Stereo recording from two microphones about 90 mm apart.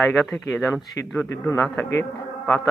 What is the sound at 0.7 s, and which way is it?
Speech, 30° left (ahead or behind).